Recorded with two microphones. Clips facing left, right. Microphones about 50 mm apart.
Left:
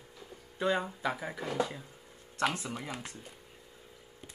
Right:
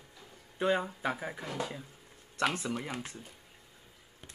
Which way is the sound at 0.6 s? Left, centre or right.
Centre.